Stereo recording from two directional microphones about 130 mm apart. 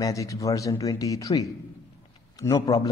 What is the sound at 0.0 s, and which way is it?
A man's voice, 25° left (ahead or behind).